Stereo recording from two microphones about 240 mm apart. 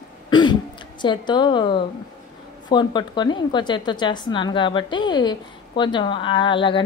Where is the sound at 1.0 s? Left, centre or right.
Centre.